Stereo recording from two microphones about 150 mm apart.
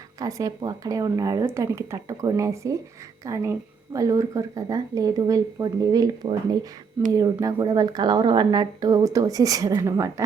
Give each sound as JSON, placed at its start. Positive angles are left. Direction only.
{"t": 0.2, "sound": "speech", "side_deg": -20}